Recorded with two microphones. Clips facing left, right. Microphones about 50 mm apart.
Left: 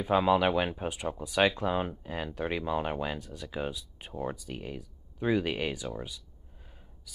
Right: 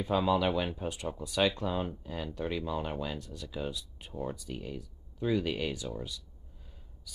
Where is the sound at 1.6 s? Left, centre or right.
Left.